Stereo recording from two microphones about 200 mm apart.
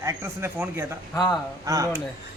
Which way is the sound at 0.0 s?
10° right (ahead or behind).